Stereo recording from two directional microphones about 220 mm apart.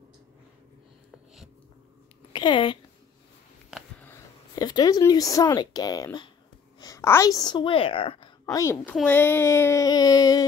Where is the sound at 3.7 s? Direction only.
10° left (ahead or behind).